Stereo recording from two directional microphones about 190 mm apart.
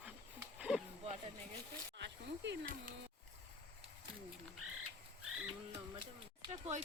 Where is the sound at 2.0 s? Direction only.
65° right (ahead or behind).